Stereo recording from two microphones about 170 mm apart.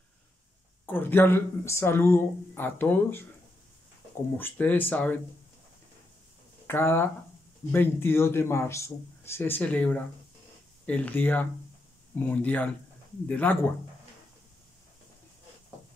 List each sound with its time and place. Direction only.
0.8 s speech: 10° left (ahead or behind)
4.4 s speech: 10° left (ahead or behind)
6.7 s speech: 15° left (ahead or behind)